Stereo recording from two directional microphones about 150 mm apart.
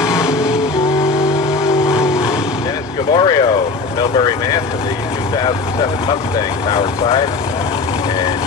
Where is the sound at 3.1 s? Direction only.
30° left (ahead or behind).